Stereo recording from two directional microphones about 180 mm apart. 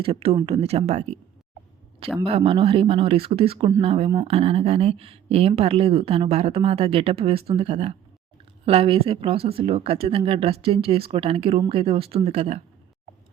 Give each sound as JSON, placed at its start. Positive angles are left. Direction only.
{"t": 0.0, "sound": "speech", "side_deg": -30}
{"t": 2.2, "sound": "speech", "side_deg": -30}